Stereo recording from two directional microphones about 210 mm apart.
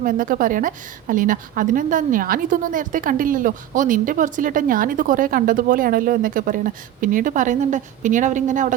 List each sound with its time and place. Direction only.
0.0 s a woman's voice: 40° right (ahead or behind)